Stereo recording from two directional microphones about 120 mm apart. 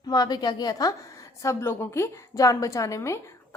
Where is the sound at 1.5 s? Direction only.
20° left (ahead or behind).